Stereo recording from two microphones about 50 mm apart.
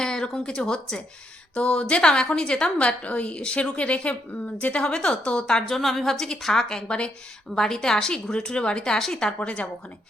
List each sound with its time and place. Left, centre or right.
0.0 s a woman's voice: centre
6.8 s a woman's voice: left
7.5 s a woman's voice: centre